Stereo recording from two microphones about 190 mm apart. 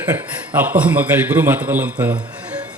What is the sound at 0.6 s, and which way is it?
A man's voice, 10° right (ahead or behind).